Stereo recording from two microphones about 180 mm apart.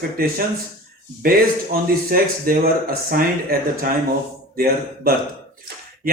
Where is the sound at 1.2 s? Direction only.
50° right (ahead or behind).